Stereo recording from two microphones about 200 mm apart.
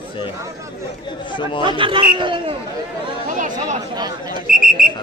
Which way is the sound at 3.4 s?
40° right (ahead or behind).